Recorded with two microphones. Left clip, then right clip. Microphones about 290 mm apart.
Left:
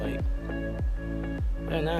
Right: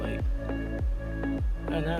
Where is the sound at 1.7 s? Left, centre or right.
Centre.